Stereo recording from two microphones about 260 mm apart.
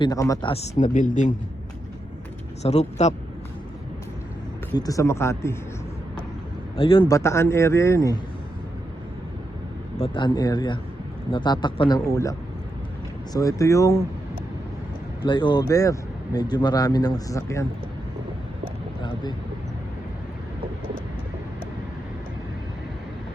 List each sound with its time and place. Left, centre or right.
0.0 s speech: centre
2.6 s speech: left
4.8 s speech: centre
6.7 s speech: centre
10.0 s speech: centre
15.2 s speech: centre